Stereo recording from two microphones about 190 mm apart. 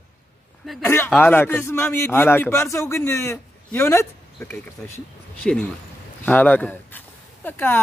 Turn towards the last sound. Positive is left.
turn(degrees=10)  # may be behind; listen again after turning